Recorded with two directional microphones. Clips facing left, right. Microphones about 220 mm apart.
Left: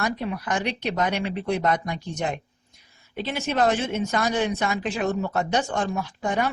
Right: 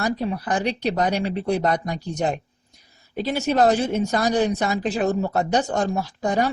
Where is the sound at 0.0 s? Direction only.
35° right (ahead or behind).